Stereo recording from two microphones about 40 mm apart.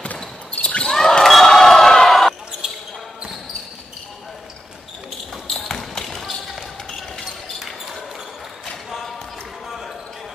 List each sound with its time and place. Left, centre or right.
0.5 s basketball bounce: left
0.8 s basketball bounce: centre
5.7 s basketball bounce: centre